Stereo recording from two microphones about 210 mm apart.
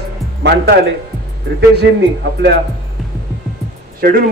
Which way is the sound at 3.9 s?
45° right (ahead or behind).